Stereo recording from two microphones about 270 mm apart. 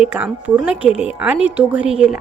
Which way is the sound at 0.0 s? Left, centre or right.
Centre.